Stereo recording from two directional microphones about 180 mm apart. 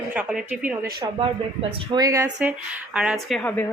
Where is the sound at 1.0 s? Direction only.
30° right (ahead or behind).